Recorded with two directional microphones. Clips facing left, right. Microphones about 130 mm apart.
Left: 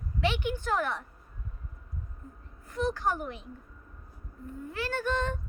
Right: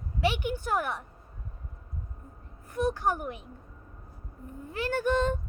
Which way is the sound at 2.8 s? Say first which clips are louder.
Right 2 dB; 15° right (ahead or behind).